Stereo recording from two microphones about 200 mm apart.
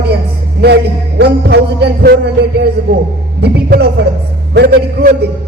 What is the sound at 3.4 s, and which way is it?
Speech, 55° right (ahead or behind).